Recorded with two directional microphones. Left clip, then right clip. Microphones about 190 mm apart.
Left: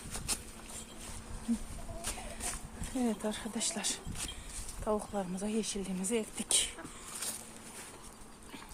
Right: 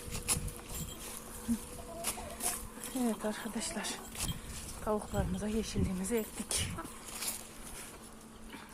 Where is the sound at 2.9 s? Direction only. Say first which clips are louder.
Even; 15° left (ahead or behind).